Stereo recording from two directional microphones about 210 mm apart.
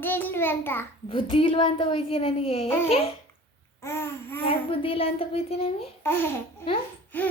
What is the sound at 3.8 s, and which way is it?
Speech, 10° left (ahead or behind).